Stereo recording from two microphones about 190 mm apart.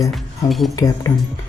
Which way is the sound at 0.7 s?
20° left (ahead or behind).